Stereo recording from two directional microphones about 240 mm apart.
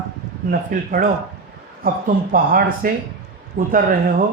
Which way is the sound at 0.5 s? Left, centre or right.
Right.